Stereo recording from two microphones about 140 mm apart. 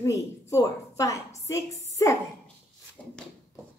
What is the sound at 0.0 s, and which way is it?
A woman's voice, 20° left (ahead or behind).